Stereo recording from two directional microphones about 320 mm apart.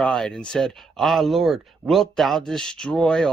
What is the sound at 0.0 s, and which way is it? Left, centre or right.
Speech, centre.